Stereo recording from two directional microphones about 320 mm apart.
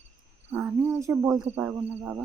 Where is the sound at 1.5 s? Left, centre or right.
Centre.